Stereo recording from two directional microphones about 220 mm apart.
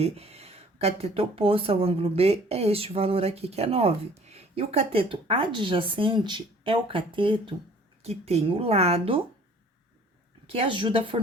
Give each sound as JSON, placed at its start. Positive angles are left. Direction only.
{"t": 0.0, "sound": "speech", "side_deg": -30}
{"t": 10.5, "sound": "speech", "side_deg": -25}